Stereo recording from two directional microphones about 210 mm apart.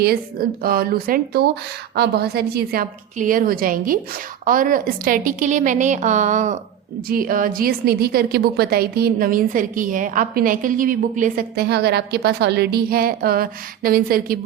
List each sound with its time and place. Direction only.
0.0 s a woman's voice: 45° right (ahead or behind)